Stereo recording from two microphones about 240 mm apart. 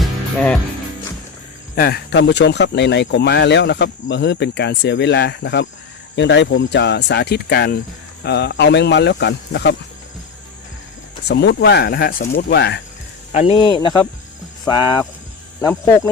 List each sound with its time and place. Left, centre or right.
0.0 s music: centre
1.7 s speech: left
11.3 s speech: left
13.3 s speech: left